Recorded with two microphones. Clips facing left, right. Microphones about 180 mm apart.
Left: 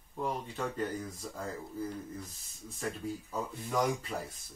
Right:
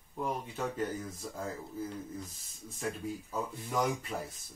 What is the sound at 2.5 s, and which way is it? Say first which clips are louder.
Speech: right 1 dB; centre (ahead or behind).